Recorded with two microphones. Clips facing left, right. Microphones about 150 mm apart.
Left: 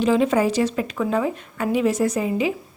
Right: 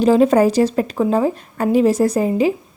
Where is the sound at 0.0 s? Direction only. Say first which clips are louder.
Right 6 dB; 40° right (ahead or behind).